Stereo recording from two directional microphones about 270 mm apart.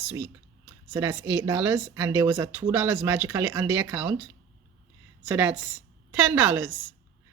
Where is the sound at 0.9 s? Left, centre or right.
Centre.